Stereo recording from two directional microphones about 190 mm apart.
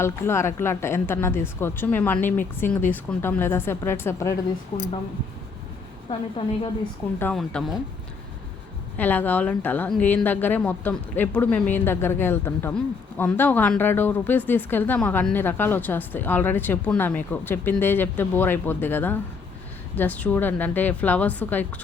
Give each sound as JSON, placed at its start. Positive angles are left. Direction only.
{"t": 0.0, "sound": "speech", "side_deg": 15}
{"t": 6.1, "sound": "a woman's voice", "side_deg": 30}
{"t": 7.2, "sound": "speech", "side_deg": 5}
{"t": 9.0, "sound": "speech", "side_deg": 10}